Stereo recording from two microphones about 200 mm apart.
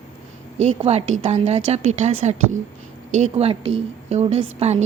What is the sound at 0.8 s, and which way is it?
A woman's voice, 30° right (ahead or behind).